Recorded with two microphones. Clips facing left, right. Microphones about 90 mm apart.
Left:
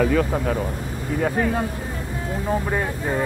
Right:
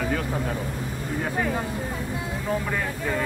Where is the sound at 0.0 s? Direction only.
60° left (ahead or behind).